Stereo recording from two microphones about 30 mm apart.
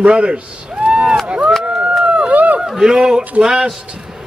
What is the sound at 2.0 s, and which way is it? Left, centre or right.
Run, right.